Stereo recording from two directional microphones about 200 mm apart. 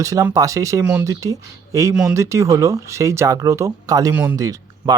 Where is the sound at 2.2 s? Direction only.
15° right (ahead or behind).